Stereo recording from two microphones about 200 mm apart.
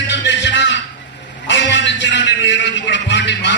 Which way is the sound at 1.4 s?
65° left (ahead or behind).